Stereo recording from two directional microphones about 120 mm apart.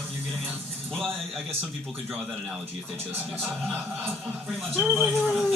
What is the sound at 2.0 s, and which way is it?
Speech, 10° right (ahead or behind).